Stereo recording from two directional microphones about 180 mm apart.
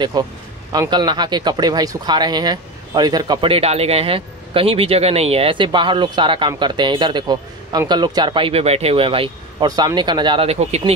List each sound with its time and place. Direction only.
0.2 s speech: 20° right (ahead or behind)